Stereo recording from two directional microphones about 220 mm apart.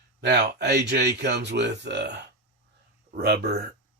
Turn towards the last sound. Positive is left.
turn(degrees=-45)  # may be behind; listen again after turning